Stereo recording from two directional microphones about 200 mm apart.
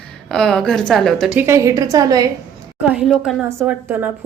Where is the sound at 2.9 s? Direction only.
5° right (ahead or behind).